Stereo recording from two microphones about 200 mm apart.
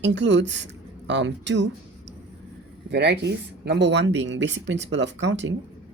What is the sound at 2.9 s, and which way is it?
Speech, 60° right (ahead or behind).